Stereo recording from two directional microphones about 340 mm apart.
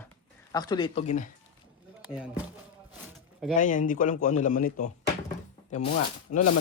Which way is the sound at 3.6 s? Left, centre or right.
Left.